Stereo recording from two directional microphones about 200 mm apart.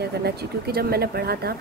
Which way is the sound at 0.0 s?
55° right (ahead or behind).